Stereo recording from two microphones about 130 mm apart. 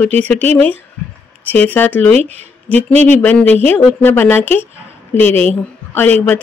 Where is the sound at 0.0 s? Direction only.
10° left (ahead or behind).